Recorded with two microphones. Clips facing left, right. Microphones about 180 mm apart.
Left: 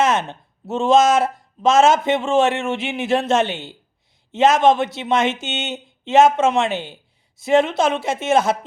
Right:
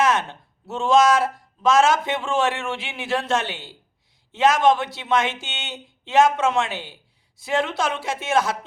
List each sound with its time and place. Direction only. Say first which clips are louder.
0.0 s a man's voice: left 2 dB; 20° left (ahead or behind)